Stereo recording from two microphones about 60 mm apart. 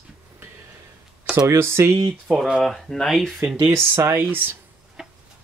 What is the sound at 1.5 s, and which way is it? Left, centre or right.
Speech, right.